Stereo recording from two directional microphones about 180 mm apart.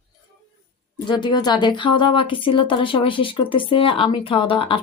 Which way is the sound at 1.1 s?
25° left (ahead or behind).